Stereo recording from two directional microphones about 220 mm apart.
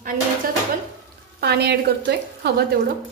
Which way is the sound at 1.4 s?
50° right (ahead or behind).